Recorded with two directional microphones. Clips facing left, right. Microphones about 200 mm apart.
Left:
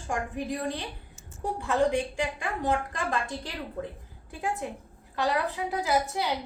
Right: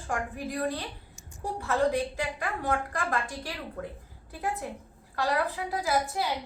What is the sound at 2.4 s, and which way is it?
A woman's voice, 20° left (ahead or behind).